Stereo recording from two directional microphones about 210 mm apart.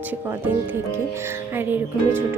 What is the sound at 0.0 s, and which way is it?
Speech, 10° right (ahead or behind).